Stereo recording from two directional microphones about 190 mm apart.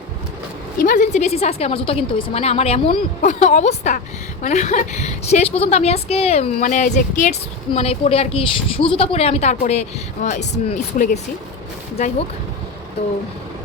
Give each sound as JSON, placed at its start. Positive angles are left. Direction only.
{"t": 0.8, "sound": "a woman's voice", "side_deg": 45}